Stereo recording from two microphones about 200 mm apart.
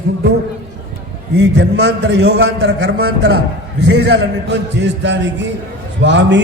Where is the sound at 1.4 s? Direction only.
60° right (ahead or behind).